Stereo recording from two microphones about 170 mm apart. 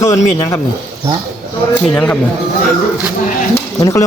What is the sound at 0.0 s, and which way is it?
Speech, 20° left (ahead or behind).